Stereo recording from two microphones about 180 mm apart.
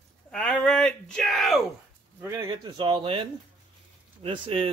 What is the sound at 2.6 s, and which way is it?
Speech, 25° right (ahead or behind).